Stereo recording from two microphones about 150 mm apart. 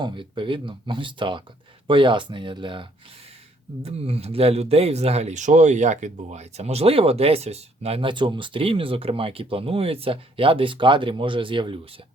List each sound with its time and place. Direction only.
0.0 s speech: 35° right (ahead or behind)
3.8 s speech: 40° right (ahead or behind)